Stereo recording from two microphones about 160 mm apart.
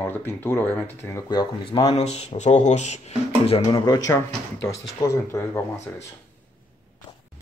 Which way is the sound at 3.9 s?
20° left (ahead or behind).